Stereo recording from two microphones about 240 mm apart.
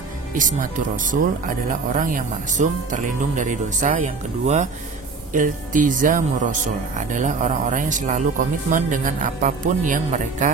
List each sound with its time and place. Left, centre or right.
0.3 s speech: right